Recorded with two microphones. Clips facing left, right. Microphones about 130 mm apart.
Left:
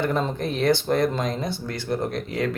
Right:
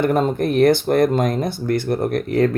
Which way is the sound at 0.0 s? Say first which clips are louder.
Right 7 dB; 55° right (ahead or behind).